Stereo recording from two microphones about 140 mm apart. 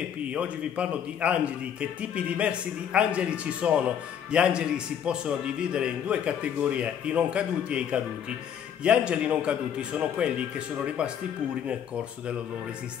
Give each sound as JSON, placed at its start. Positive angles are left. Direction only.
{"t": 0.3, "sound": "a man's voice", "side_deg": -10}